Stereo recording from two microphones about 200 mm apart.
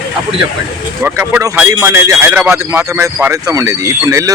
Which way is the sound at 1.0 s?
10° right (ahead or behind).